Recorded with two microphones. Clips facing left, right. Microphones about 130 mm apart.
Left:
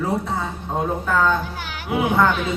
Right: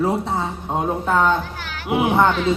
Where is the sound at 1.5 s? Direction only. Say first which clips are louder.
Even; 15° left (ahead or behind).